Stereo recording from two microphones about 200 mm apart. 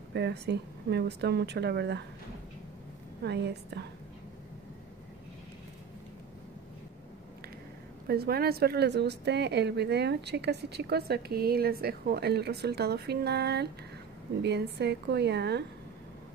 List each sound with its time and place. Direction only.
0.1 s a woman's voice: 55° right (ahead or behind)
3.3 s a woman's voice: 55° right (ahead or behind)
8.1 s a woman's voice: 50° right (ahead or behind)